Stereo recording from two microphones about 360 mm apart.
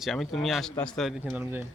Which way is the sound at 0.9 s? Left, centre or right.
Centre.